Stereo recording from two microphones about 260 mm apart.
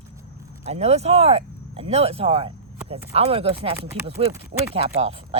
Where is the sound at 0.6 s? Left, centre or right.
Right.